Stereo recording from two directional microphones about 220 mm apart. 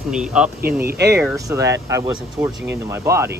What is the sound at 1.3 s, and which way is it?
Speech, 15° right (ahead or behind).